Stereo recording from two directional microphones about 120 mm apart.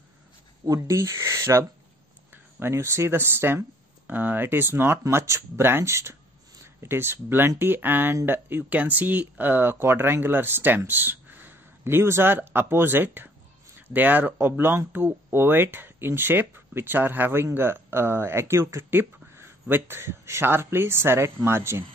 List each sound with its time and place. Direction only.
0.7 s speech: 25° right (ahead or behind)